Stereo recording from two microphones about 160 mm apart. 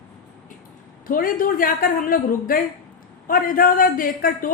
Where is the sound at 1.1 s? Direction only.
60° left (ahead or behind).